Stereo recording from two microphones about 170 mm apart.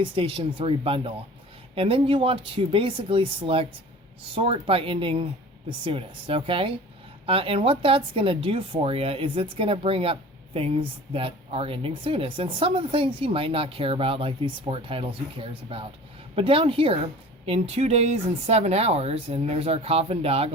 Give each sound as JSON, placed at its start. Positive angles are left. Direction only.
{"t": 0.0, "sound": "speech", "side_deg": -30}